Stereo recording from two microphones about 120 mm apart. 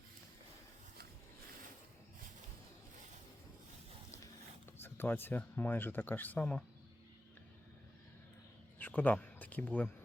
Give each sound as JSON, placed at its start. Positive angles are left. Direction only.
{"t": 4.8, "sound": "speech", "side_deg": 15}
{"t": 8.8, "sound": "speech", "side_deg": 15}